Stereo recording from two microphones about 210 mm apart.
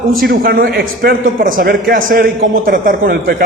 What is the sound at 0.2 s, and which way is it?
A man's voice, 45° right (ahead or behind).